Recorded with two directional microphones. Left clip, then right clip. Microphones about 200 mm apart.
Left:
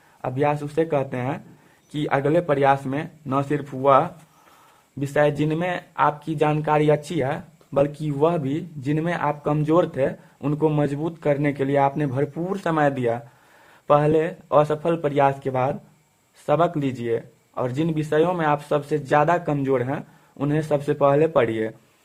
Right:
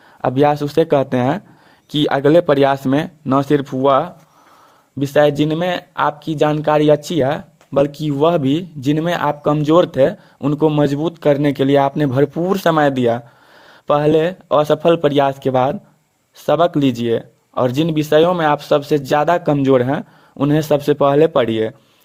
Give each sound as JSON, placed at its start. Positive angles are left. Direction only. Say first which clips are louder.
{"t": 0.2, "sound": "speech", "louder": "right 8 dB", "side_deg": -45}